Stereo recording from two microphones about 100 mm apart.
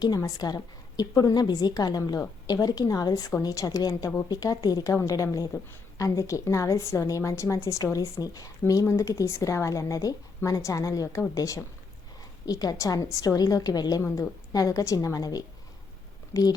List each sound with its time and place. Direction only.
0.0 s a woman's voice: 40° left (ahead or behind)